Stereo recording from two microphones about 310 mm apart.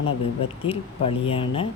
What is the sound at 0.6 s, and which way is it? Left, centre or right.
Speech, centre.